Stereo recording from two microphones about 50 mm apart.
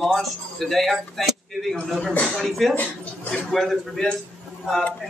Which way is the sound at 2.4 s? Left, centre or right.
Centre.